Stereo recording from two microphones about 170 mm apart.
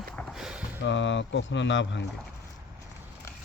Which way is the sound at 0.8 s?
90° left.